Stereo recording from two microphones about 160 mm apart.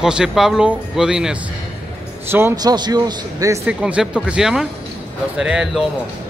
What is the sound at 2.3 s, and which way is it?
A man's voice, 15° right (ahead or behind).